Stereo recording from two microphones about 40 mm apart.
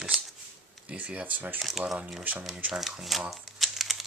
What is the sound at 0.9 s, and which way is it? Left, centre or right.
Speech, right.